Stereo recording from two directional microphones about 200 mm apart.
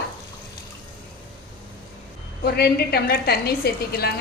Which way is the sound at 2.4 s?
55° left (ahead or behind).